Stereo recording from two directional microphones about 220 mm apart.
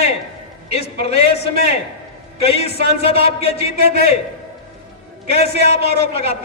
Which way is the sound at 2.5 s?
25° left (ahead or behind).